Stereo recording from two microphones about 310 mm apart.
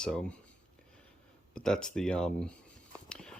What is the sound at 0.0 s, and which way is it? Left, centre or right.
Speech, centre.